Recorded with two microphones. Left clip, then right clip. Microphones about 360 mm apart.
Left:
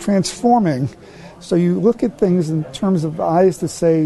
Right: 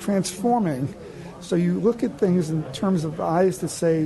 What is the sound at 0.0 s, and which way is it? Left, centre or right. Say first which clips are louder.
Speech: left 6 dB; left.